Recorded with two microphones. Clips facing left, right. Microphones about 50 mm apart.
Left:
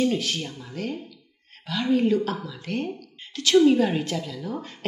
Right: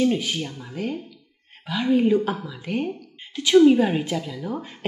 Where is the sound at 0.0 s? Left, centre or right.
Centre.